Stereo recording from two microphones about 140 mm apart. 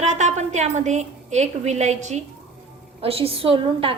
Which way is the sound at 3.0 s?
45° right (ahead or behind).